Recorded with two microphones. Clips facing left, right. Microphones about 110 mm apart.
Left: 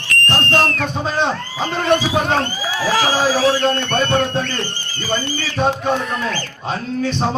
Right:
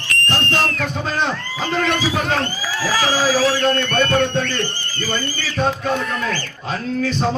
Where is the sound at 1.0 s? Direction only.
20° left (ahead or behind).